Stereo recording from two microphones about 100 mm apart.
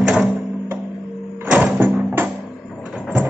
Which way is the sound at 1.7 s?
20° right (ahead or behind).